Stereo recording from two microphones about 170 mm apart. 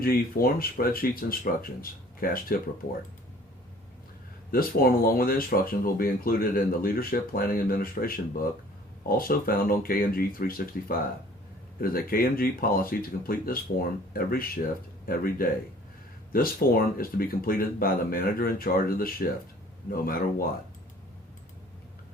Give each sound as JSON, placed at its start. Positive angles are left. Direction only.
{"t": 0.0, "sound": "speech", "side_deg": 60}
{"t": 4.5, "sound": "speech", "side_deg": 60}